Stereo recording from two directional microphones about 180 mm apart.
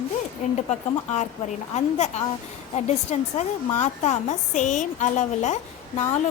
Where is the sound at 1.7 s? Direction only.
40° left (ahead or behind).